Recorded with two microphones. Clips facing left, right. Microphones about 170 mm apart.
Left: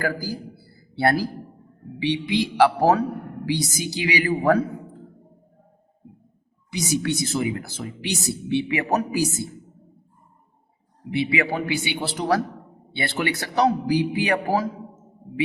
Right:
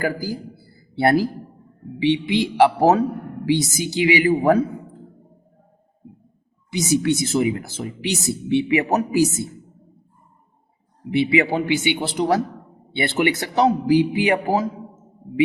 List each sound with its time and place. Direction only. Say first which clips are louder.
0.0 s speech: right 2 dB; 20° right (ahead or behind)
6.7 s speech: right 5 dB; 25° right (ahead or behind)
11.1 s speech: right 5 dB; 25° right (ahead or behind)